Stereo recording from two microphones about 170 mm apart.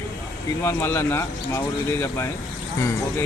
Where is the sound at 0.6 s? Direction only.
15° left (ahead or behind).